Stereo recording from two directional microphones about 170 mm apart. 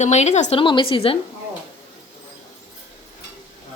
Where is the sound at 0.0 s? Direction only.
40° left (ahead or behind).